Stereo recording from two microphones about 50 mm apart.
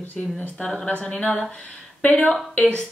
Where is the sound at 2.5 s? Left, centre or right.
Left.